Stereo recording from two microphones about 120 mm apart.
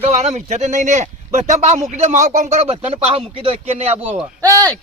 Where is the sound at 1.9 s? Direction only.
85° right; by 3.9 s 60° right (ahead or behind).